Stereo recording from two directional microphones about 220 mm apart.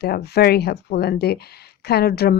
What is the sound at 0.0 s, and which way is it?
Speech, 45° left (ahead or behind).